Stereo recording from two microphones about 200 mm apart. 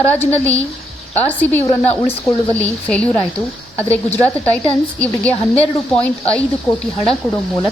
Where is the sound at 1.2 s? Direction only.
10° left (ahead or behind).